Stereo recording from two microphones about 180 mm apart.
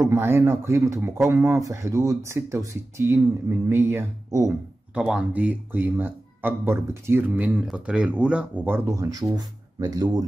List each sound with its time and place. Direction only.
0.1 s speech: 15° right (ahead or behind)
4.9 s speech: 5° right (ahead or behind); by 10.2 s 20° right (ahead or behind)